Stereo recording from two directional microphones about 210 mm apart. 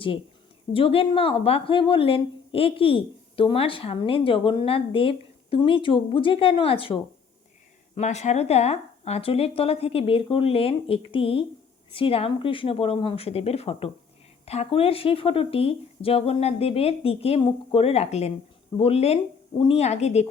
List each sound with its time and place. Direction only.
0.7 s speech: 25° left (ahead or behind)